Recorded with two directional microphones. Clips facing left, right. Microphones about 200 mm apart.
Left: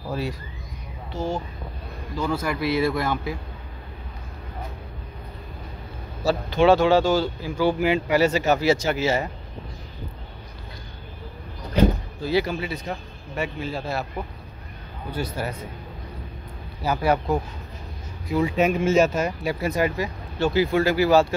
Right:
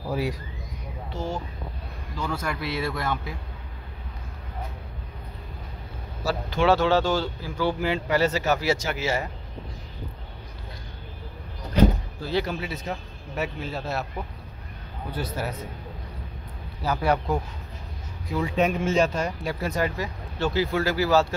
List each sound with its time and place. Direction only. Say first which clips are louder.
0.1 s speech: right 1 dB; 15° right (ahead or behind)
2.1 s speech: left 5 dB; 10° left (ahead or behind)
6.2 s speech: left 4 dB; 20° left (ahead or behind)
12.3 s speech: left 4 dB; 5° left (ahead or behind)
15.0 s speech: left 2 dB; centre (ahead or behind)
16.8 s speech: left 2 dB; 5° left (ahead or behind)